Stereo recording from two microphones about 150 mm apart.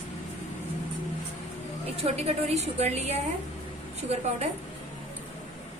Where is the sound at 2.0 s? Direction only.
45° right (ahead or behind).